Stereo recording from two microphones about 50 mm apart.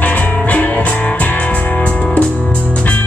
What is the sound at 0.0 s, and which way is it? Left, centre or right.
Music, left.